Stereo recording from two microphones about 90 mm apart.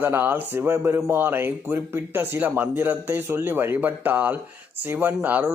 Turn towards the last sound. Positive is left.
turn(degrees=-20)  # may be behind; listen again after turning